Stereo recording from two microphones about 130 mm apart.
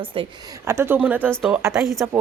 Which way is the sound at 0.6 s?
20° right (ahead or behind).